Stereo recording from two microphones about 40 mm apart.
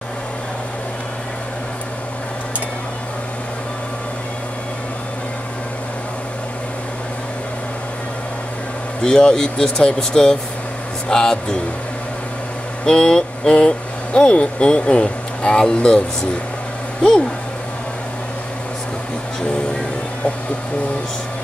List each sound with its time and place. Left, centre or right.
9.0 s speech: centre
12.8 s speech: centre